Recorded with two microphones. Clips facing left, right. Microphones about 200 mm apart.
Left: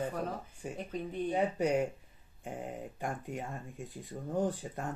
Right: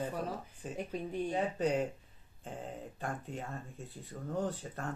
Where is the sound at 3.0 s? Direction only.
15° left (ahead or behind).